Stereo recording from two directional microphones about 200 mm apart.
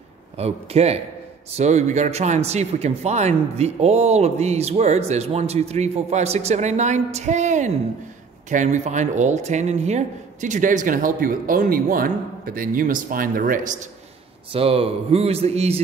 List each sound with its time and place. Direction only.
0.4 s speech: 30° right (ahead or behind)
14.5 s speech: 30° right (ahead or behind)